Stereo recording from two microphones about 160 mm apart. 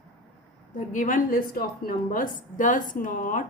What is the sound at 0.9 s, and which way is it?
A woman's voice, 55° left (ahead or behind).